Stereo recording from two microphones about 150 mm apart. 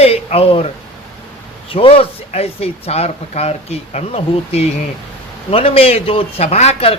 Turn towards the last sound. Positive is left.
turn(degrees=45)  # may be behind; listen again after turning